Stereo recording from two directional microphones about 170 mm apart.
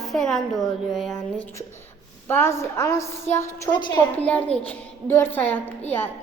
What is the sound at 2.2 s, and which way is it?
A woman's voice, 15° left (ahead or behind).